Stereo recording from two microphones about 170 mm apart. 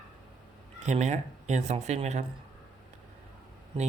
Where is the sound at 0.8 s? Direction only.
40° right (ahead or behind).